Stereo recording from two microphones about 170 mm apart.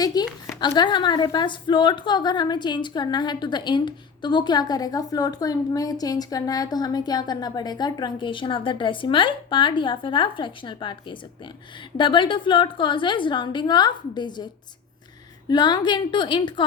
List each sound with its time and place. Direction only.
0.0 s a woman's voice: 25° left (ahead or behind)